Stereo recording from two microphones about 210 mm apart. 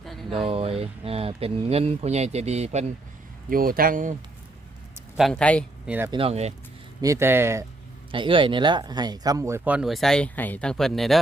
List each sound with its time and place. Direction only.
0.0 s a sound: centre (ahead or behind)
0.3 s speech: 30° right (ahead or behind)
3.5 s speech: 45° right (ahead or behind)
5.1 s speech: centre (ahead or behind)
6.1 s speech: 25° right (ahead or behind)
7.0 s speech: 15° right (ahead or behind)
8.1 s speech: 25° right (ahead or behind); by 11.2 s centre (ahead or behind)